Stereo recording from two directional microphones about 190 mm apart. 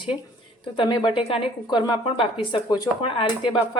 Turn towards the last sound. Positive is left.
turn(degrees=25)  # may be behind; listen again after turning